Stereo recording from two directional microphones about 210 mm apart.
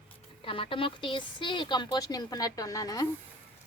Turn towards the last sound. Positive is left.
turn(degrees=15)  # may be behind; listen again after turning